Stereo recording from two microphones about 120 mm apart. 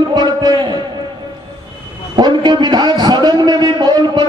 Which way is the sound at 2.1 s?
40° right (ahead or behind).